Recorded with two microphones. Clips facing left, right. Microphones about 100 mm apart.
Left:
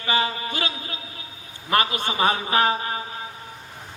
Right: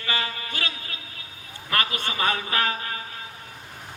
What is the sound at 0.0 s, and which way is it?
A man's voice, 25° left (ahead or behind).